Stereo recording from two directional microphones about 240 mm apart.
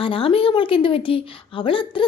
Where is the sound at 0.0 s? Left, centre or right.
Left.